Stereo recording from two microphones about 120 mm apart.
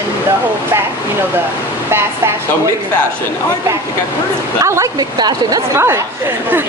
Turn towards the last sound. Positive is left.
turn(degrees=-20)  # may be behind; listen again after turning